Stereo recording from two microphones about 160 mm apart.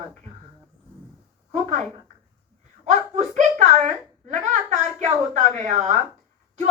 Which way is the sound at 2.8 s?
45° right (ahead or behind).